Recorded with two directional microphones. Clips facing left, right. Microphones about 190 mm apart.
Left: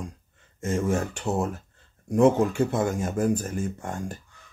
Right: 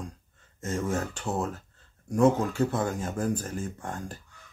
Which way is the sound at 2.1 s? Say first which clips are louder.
Left 3 dB; 25° left (ahead or behind).